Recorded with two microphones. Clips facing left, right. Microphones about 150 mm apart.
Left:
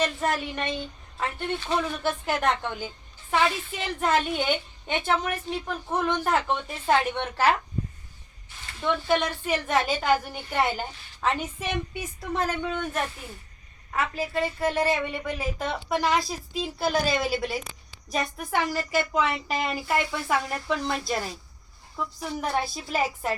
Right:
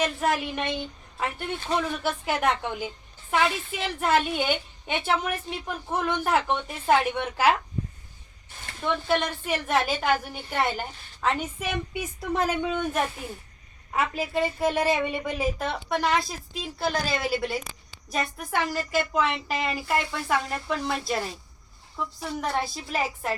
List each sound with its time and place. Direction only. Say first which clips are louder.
0.0 s a woman's voice: right 1 dB; 10° right (ahead or behind)
8.8 s a woman's voice: left 1 dB; centre (ahead or behind)
12.3 s speech: right 2 dB; 15° right (ahead or behind)
15.5 s a woman's voice: even; centre (ahead or behind)